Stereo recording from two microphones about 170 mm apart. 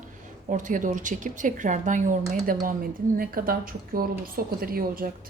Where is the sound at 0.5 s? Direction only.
50° right (ahead or behind).